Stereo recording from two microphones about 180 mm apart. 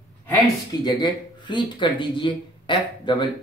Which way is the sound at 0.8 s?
25° left (ahead or behind).